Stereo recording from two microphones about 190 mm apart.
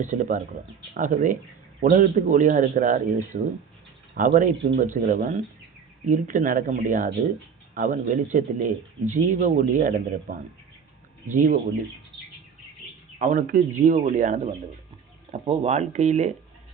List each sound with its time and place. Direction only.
0.0 s a man's voice: 40° right (ahead or behind)
13.1 s a man's voice: 45° right (ahead or behind)